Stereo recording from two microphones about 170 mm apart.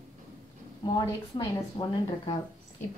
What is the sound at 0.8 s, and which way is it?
A woman's voice, 25° left (ahead or behind).